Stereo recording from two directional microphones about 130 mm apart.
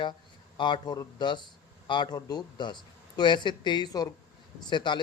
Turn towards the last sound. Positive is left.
turn(degrees=35)  # may be behind; listen again after turning